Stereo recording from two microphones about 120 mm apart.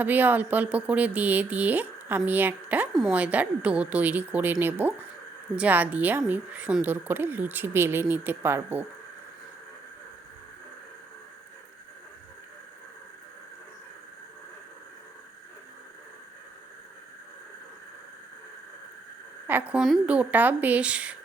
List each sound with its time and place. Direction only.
0.0 s speech: 15° right (ahead or behind)
19.5 s a sound: 15° right (ahead or behind)
19.8 s speech: 5° right (ahead or behind)